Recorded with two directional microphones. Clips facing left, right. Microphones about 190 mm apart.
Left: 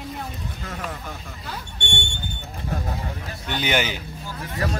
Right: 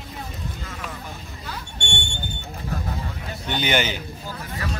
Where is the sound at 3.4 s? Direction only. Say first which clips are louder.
Right 1 dB; centre (ahead or behind).